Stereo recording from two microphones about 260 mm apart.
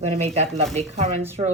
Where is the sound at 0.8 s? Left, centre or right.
Right.